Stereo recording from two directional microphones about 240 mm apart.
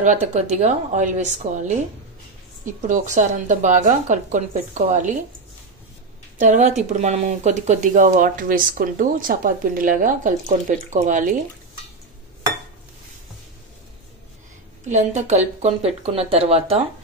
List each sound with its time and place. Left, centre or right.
0.0 s speech: right
6.3 s a woman's voice: right
14.9 s speech: right